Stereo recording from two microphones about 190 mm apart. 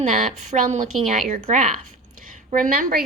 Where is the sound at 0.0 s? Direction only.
45° right (ahead or behind).